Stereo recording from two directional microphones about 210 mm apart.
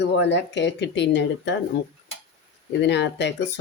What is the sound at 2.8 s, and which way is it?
Speech, 55° left (ahead or behind).